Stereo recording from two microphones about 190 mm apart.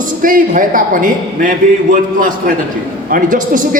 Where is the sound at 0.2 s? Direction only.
45° right (ahead or behind).